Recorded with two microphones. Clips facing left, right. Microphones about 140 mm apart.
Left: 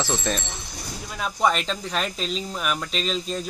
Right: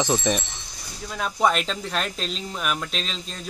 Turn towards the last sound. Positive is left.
turn(degrees=5)  # may be behind; listen again after turning